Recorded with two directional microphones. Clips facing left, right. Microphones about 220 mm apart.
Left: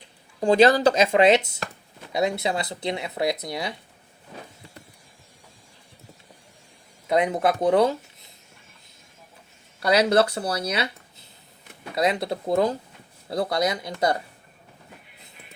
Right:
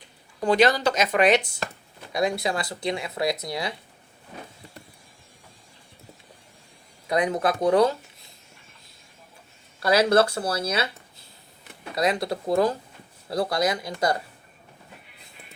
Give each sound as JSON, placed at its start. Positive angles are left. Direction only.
{"t": 0.3, "sound": "speech", "side_deg": 30}
{"t": 7.1, "sound": "speech", "side_deg": 25}
{"t": 9.9, "sound": "speech", "side_deg": 20}
{"t": 11.9, "sound": "speech", "side_deg": 25}